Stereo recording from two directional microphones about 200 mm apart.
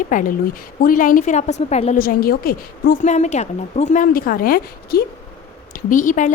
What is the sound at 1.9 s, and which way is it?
A woman's voice, 50° left (ahead or behind).